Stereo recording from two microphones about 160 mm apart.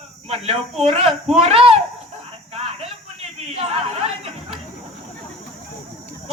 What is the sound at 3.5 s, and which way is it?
Speech, 40° right (ahead or behind).